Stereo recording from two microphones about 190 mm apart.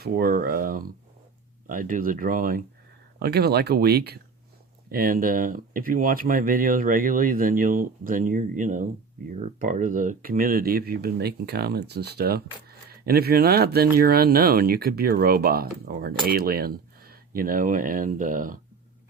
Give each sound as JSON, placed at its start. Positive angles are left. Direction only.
{"t": 0.0, "sound": "speech", "side_deg": -50}
{"t": 3.2, "sound": "speech", "side_deg": -55}